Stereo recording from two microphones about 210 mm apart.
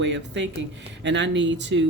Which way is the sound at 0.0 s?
60° right (ahead or behind).